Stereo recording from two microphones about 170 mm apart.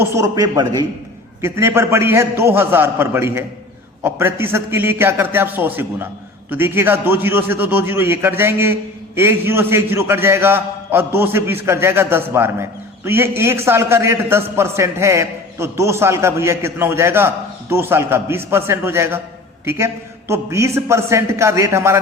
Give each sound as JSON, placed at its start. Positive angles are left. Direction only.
{"t": 0.0, "sound": "a man's voice", "side_deg": -20}